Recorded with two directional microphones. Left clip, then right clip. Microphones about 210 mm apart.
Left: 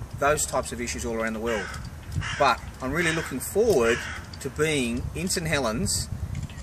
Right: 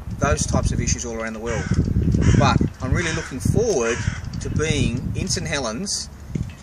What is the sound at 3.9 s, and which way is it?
Speech, 30° left (ahead or behind).